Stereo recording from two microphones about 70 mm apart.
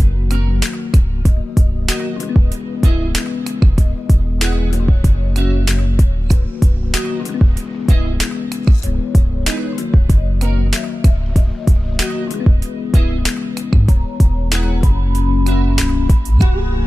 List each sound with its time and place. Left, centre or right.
0.3 s music: centre